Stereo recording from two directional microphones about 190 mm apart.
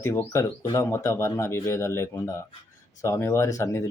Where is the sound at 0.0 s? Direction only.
15° left (ahead or behind).